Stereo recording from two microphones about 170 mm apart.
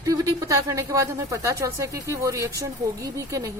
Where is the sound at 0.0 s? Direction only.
20° right (ahead or behind).